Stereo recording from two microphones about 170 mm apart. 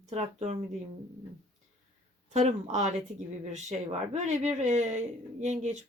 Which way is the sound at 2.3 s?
45° right (ahead or behind).